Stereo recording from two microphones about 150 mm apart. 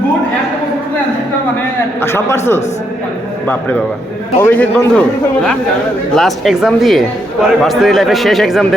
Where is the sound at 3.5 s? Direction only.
10° left (ahead or behind).